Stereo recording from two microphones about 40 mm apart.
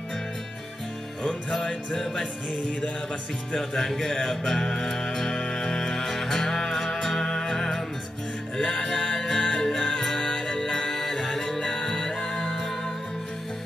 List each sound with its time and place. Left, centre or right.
1.6 s music: centre
3.5 s music: centre